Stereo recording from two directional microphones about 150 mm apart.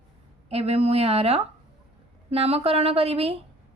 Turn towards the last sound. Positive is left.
turn(degrees=-40)  # may be behind; listen again after turning